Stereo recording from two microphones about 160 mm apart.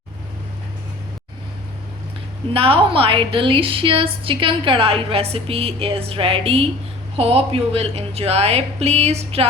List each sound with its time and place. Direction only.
2.5 s a woman's voice: 35° right (ahead or behind)